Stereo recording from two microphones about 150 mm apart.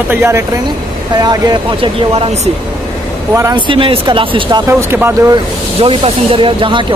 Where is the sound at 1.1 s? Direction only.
25° right (ahead or behind).